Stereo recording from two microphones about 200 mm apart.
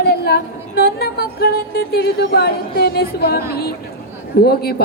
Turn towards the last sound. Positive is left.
turn(degrees=50)  # may be behind; listen again after turning